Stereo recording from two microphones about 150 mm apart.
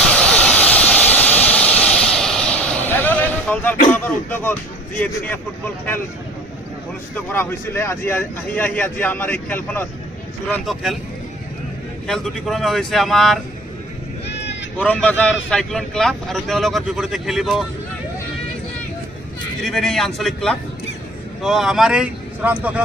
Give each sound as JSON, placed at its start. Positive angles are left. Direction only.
{"t": 0.0, "sound": "vehicle", "side_deg": 5}
{"t": 3.9, "sound": "speech", "side_deg": 15}
{"t": 7.3, "sound": "speech", "side_deg": 15}
{"t": 12.0, "sound": "speech", "side_deg": 5}
{"t": 14.8, "sound": "speech", "side_deg": 10}
{"t": 19.6, "sound": "speech", "side_deg": 0}